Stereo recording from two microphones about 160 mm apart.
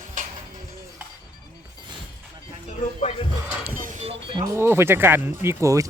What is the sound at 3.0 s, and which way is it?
Speech, 40° left (ahead or behind).